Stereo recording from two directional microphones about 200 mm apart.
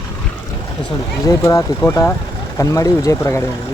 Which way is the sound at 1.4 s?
15° left (ahead or behind).